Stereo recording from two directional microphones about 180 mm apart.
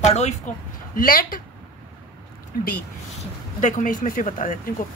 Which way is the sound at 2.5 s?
50° left (ahead or behind).